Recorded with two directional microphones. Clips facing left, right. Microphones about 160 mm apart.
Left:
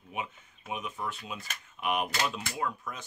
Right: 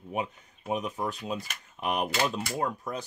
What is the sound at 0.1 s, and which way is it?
Speech, 40° right (ahead or behind).